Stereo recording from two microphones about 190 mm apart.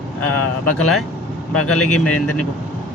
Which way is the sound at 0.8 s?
5° left (ahead or behind).